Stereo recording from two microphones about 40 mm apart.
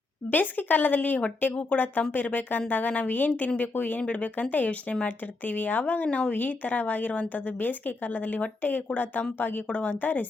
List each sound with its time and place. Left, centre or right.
0.3 s speech: left
5.0 s speech: left
6.1 s speech: left
6.3 s speech: left
9.6 s speech: left